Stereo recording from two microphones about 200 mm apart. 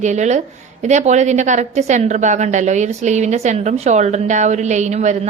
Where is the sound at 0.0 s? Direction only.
35° right (ahead or behind).